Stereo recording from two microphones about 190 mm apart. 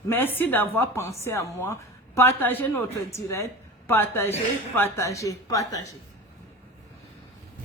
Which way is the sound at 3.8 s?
10° left (ahead or behind).